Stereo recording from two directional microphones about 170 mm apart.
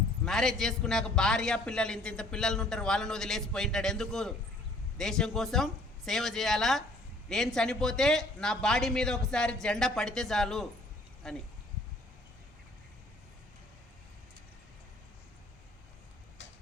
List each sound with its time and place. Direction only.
0.3 s a man's voice: centre (ahead or behind)
16.4 s tick-tock: 90° left